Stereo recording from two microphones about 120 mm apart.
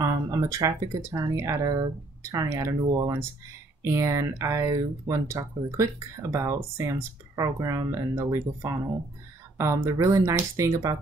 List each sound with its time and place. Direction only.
0.0 s speech: 25° right (ahead or behind)